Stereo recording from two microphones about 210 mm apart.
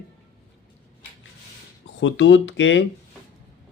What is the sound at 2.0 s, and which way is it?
Speech, 60° left (ahead or behind).